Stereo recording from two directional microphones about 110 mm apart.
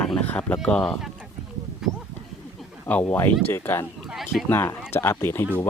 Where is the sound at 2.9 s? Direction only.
15° left (ahead or behind).